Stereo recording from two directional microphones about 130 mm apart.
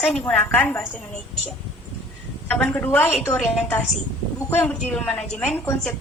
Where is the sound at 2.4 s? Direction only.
10° left (ahead or behind).